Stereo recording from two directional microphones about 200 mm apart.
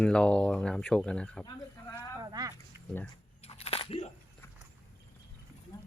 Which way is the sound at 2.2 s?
20° right (ahead or behind).